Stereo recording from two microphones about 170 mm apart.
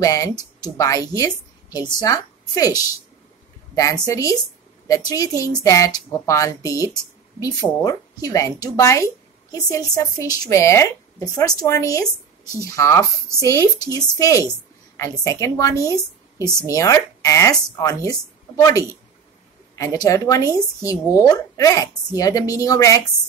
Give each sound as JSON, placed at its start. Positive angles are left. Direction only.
{"t": 0.0, "sound": "speech", "side_deg": 20}
{"t": 19.7, "sound": "speech", "side_deg": 20}